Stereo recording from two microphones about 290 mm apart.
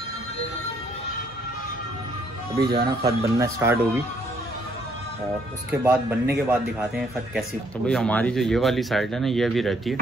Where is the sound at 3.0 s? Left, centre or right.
Centre.